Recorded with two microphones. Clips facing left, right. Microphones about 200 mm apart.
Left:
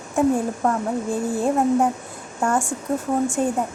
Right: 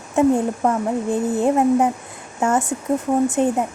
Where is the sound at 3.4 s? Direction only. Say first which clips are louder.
Right 4 dB; 20° right (ahead or behind).